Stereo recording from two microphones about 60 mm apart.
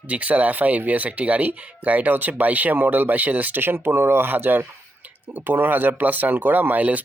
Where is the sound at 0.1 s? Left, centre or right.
Right.